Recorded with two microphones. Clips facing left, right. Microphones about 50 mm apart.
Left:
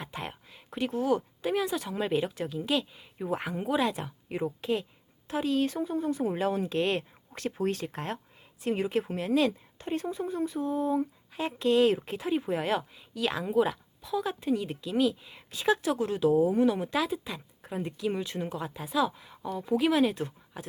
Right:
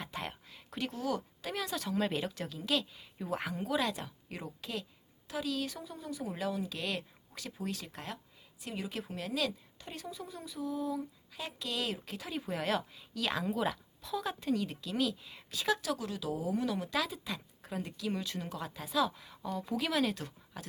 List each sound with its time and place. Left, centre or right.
0.1 s speech: centre